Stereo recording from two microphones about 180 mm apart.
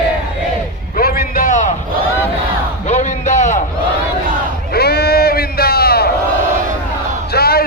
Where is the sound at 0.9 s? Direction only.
55° left (ahead or behind).